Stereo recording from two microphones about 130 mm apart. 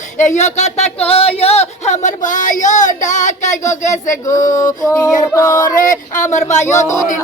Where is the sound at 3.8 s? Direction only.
65° left (ahead or behind).